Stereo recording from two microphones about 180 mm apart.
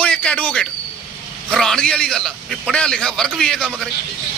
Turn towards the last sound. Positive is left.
turn(degrees=5)  # may be behind; listen again after turning